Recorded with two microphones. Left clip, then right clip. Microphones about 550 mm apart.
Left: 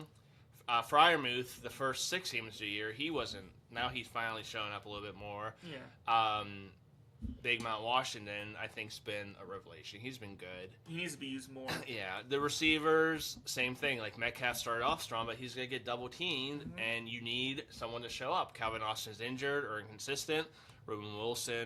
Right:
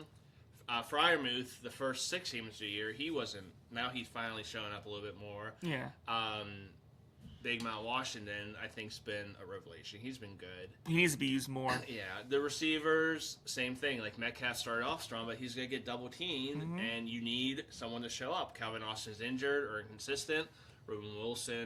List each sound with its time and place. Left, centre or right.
0.7 s speech: left
10.8 s speech: right
11.7 s speech: left